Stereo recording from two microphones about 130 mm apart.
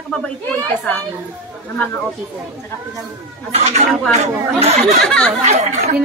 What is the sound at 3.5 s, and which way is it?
A woman's voice, 55° right (ahead or behind).